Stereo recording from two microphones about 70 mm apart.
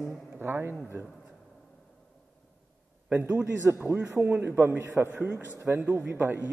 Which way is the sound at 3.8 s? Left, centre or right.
Right.